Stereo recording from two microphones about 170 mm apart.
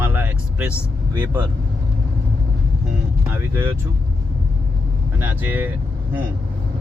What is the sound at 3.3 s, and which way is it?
Speech, 15° right (ahead or behind).